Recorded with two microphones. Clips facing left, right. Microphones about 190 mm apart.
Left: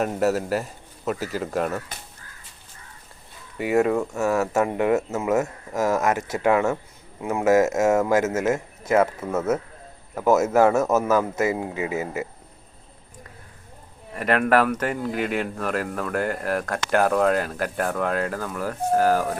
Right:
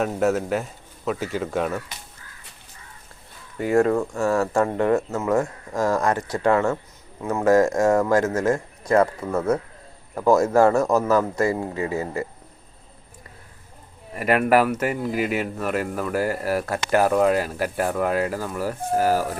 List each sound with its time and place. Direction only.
0.0 s speech: centre (ahead or behind)
3.6 s speech: 5° left (ahead or behind)
8.4 s speech: 20° left (ahead or behind)
9.0 s speech: 5° left (ahead or behind)
11.3 s speech: 20° left (ahead or behind)
14.1 s speech: 5° right (ahead or behind)